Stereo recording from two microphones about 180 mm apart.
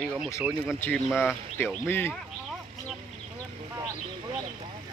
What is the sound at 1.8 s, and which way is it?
Speech, 10° left (ahead or behind).